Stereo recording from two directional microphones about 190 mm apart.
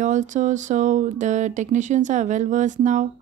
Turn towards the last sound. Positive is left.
turn(degrees=-40)  # may be behind; listen again after turning